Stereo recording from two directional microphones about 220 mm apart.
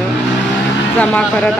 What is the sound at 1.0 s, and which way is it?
Speech, 5° left (ahead or behind).